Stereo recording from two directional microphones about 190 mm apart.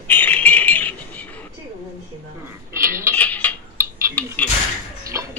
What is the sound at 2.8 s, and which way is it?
Cutlery, 15° right (ahead or behind).